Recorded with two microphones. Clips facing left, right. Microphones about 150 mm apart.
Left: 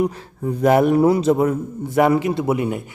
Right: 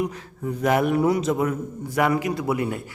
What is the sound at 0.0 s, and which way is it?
A man's voice, 35° left (ahead or behind).